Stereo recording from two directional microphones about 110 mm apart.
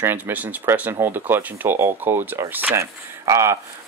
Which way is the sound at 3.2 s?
30° right (ahead or behind).